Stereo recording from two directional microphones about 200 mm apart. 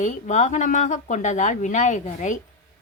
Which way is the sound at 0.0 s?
35° left (ahead or behind).